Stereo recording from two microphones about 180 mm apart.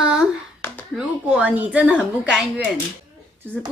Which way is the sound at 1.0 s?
5° right (ahead or behind).